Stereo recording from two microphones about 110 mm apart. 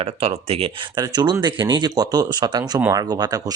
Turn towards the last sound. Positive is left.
turn(degrees=-35)  # may be behind; listen again after turning